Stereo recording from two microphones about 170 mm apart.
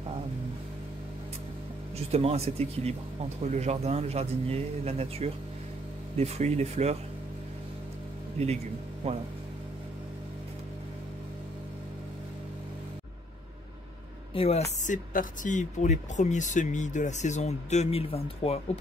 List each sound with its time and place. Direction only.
2.0 s speech: 40° right (ahead or behind)
9.0 s speech: 35° right (ahead or behind)
14.3 s speech: 35° left (ahead or behind)